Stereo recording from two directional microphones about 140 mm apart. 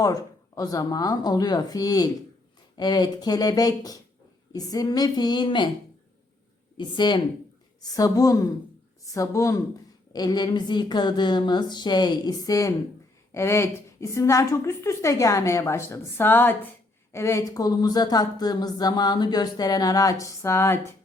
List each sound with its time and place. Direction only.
0.0 s speech: 25° left (ahead or behind)
6.7 s speech: 35° left (ahead or behind)